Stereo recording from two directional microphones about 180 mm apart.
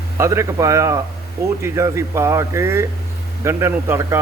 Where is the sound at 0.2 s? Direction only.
15° right (ahead or behind).